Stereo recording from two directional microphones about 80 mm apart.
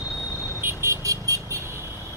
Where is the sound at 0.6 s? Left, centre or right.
Right.